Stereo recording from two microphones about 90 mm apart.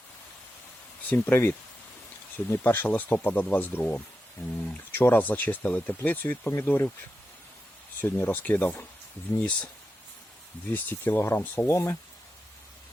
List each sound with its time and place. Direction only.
1.1 s speech: 25° left (ahead or behind)
8.0 s speech: 25° left (ahead or behind)
10.7 s speech: 20° left (ahead or behind)